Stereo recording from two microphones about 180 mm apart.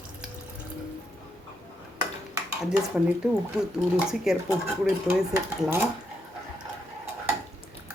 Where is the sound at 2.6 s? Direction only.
5° right (ahead or behind).